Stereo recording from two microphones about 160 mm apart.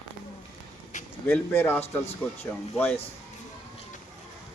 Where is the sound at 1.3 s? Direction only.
15° left (ahead or behind).